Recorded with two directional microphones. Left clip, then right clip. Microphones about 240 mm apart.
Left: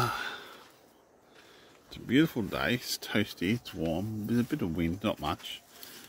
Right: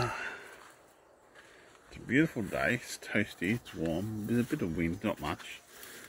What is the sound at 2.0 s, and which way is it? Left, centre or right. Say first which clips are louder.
Speech: left 2 dB; centre.